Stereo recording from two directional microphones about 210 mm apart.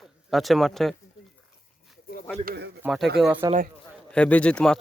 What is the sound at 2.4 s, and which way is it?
Speech, 45° right (ahead or behind).